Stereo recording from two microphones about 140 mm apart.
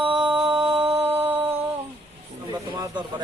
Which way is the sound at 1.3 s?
15° right (ahead or behind).